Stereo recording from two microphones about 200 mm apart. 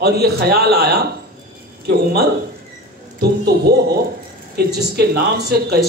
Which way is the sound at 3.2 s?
50° right (ahead or behind).